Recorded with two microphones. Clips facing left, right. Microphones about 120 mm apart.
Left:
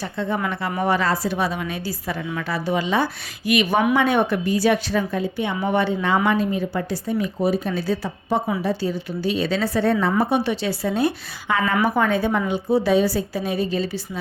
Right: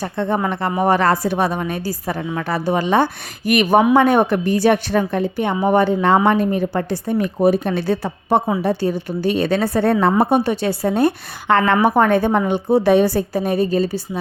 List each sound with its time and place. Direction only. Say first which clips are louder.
0.0 s a woman's voice: right 4 dB; 55° right (ahead or behind)
11.9 s a woman's voice: right 5 dB; 55° right (ahead or behind)